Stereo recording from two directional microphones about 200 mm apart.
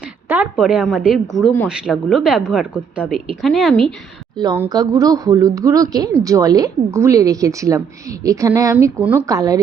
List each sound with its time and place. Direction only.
0.3 s speech: 5° right (ahead or behind)
4.4 s speech: 15° right (ahead or behind)